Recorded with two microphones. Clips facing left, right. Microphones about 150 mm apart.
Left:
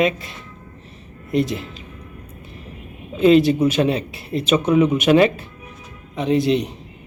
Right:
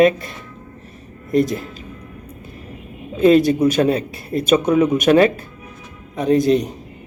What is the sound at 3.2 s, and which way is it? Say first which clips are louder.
Speech: right 1 dB; 40° right (ahead or behind).